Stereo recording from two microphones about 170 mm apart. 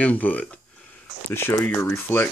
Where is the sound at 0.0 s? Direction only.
10° left (ahead or behind).